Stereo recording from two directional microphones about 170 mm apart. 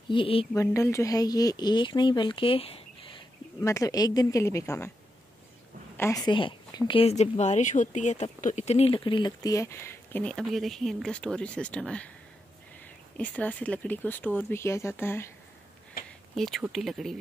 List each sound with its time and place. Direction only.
0.1 s speech: 30° left (ahead or behind)
0.6 s speech: 15° left (ahead or behind)
3.6 s speech: 20° left (ahead or behind)
5.9 s speech: 20° left (ahead or behind)
13.2 s speech: 10° left (ahead or behind)
16.0 s a sound: 65° left (ahead or behind)
16.3 s speech: centre (ahead or behind)